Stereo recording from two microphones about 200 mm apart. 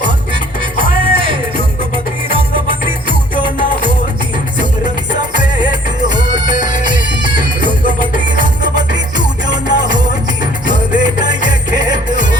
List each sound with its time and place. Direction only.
0.8 s music: 25° right (ahead or behind)
5.3 s music: 20° right (ahead or behind)